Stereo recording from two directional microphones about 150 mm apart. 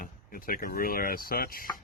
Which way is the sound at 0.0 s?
70° left (ahead or behind).